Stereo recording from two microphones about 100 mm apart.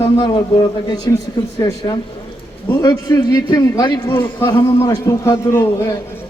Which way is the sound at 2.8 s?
35° left (ahead or behind).